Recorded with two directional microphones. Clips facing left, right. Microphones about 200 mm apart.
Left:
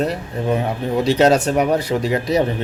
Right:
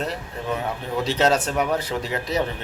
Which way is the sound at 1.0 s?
15° left (ahead or behind).